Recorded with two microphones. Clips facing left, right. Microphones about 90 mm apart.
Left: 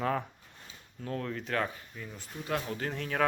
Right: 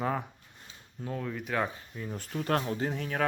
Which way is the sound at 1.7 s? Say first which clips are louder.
Right 5 dB; 30° right (ahead or behind).